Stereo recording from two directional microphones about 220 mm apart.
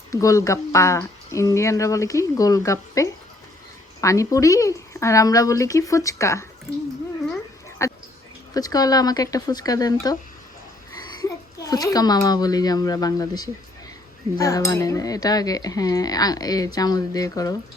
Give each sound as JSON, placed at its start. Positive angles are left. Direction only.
{"t": 0.1, "sound": "cutlery", "side_deg": 15}
{"t": 7.8, "sound": "a sound", "side_deg": 15}
{"t": 8.5, "sound": "cutlery", "side_deg": 15}
{"t": 11.2, "sound": "a child's voice", "side_deg": 15}
{"t": 14.3, "sound": "cutlery", "side_deg": 15}